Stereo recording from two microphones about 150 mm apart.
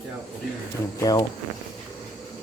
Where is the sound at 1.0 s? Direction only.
25° left (ahead or behind).